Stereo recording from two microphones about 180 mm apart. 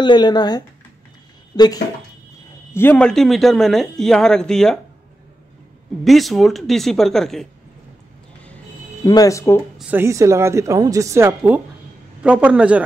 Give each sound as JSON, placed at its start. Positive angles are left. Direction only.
{"t": 0.0, "sound": "a man's voice", "side_deg": 25}
{"t": 6.0, "sound": "a man's voice", "side_deg": 0}
{"t": 9.0, "sound": "speech", "side_deg": 20}
{"t": 9.8, "sound": "a woman's voice", "side_deg": -10}